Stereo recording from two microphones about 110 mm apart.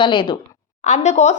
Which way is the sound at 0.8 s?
90° left.